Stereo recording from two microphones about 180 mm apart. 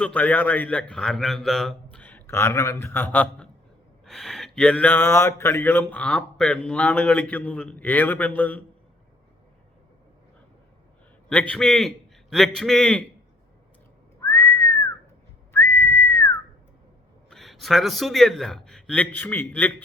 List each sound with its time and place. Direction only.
0.0 s a sound: 10° left (ahead or behind)
11.3 s a man's voice: 5° left (ahead or behind)
14.2 s whistling: 15° left (ahead or behind)
17.2 s a man's voice: centre (ahead or behind)